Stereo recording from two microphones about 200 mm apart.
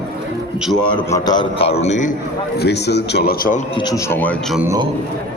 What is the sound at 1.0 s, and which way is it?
A man's voice, 15° left (ahead or behind).